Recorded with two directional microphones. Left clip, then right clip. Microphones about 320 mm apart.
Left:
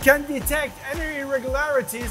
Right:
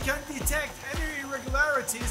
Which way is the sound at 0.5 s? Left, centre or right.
Left.